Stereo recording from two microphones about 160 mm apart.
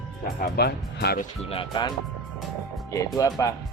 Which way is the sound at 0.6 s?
90° left.